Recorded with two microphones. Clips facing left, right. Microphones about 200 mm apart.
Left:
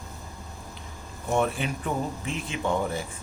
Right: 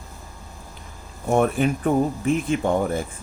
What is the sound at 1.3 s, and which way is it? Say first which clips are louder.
Speech: right 6 dB; 50° right (ahead or behind).